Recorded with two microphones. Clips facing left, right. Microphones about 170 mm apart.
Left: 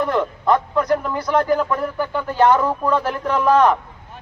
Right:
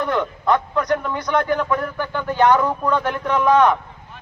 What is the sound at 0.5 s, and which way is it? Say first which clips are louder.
Speech: left 2 dB; 30° left (ahead or behind).